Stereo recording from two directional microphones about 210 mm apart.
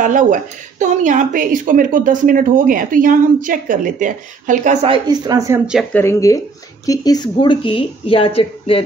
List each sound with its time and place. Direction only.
0.0 s speech: 40° right (ahead or behind)
4.8 s speech: 20° right (ahead or behind)
5.9 s speech: 15° left (ahead or behind)